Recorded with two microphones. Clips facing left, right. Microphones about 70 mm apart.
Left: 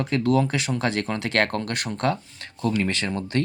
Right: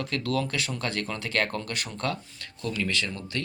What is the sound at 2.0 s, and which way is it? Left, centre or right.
Speech, left.